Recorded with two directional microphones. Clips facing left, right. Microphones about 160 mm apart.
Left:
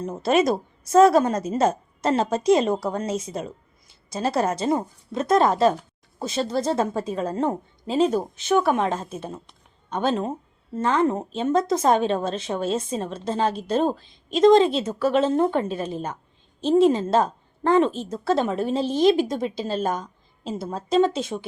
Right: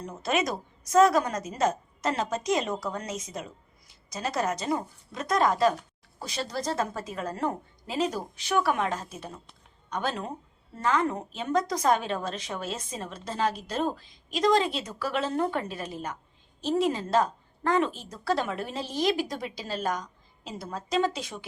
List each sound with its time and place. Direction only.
0.2 s a woman's voice: 30° left (ahead or behind)